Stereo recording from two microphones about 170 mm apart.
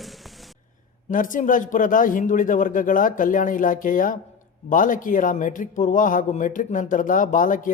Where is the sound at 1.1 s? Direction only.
50° left (ahead or behind).